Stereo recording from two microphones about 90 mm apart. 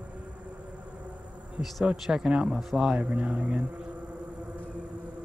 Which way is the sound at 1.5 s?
Centre (ahead or behind).